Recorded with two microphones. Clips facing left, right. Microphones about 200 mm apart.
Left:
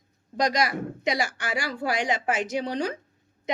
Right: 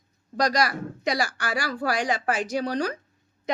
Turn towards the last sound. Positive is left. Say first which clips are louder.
# right 1 dB
turn(degrees=20)  # may be behind; listen again after turning